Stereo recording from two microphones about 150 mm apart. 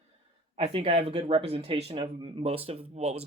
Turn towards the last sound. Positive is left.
turn(degrees=-45)  # may be behind; listen again after turning